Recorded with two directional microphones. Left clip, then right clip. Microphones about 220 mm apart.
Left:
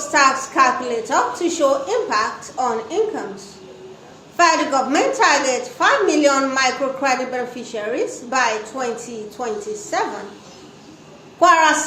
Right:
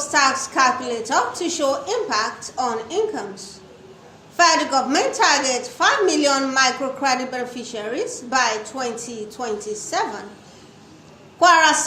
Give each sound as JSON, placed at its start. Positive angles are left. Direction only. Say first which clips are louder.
{"t": 0.1, "sound": "a woman's voice", "louder": "left 3 dB", "side_deg": -40}
{"t": 4.4, "sound": "a woman's voice", "louder": "left 1 dB", "side_deg": -40}
{"t": 11.3, "sound": "a woman's voice", "louder": "left 1 dB", "side_deg": -40}